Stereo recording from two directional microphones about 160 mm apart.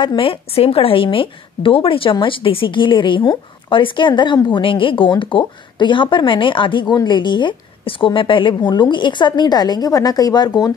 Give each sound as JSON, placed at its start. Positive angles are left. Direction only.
{"t": 0.0, "sound": "a woman's voice", "side_deg": 30}